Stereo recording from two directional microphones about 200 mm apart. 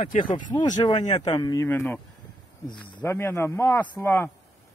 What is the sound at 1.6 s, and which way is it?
Speech, 10° left (ahead or behind).